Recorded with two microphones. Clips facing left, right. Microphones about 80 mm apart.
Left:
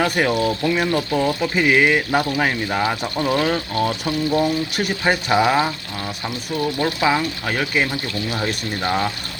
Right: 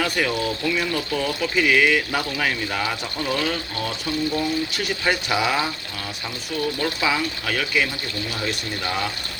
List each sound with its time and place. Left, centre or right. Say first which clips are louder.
0.3 s speech: left 5 dB; left
5.0 s speech: left 5 dB; left
6.7 s speech: left 6 dB; left